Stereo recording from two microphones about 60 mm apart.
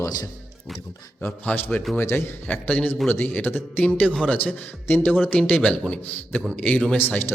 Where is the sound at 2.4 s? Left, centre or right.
Left.